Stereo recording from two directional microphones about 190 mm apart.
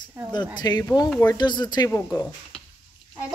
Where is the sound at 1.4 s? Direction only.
20° left (ahead or behind).